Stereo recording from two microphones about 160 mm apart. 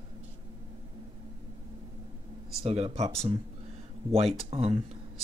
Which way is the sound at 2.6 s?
40° right (ahead or behind).